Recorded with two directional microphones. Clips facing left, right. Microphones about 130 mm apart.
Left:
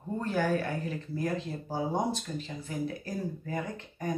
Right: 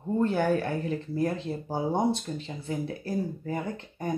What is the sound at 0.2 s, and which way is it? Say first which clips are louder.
Speech: right 4 dB; 30° right (ahead or behind).